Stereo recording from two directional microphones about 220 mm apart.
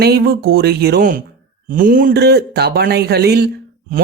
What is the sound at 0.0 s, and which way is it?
Speech, 45° right (ahead or behind).